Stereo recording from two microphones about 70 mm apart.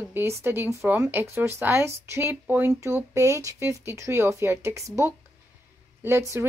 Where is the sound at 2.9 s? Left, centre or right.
Right.